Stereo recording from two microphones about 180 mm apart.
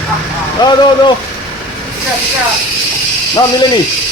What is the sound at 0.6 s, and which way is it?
Speech, 25° left (ahead or behind).